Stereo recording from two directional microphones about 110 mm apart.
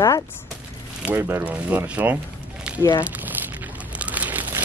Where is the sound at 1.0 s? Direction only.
15° right (ahead or behind).